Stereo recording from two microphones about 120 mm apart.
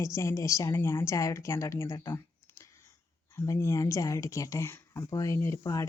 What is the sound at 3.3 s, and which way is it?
Speech, 25° left (ahead or behind).